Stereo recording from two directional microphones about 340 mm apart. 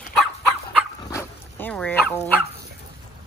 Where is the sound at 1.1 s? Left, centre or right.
Centre.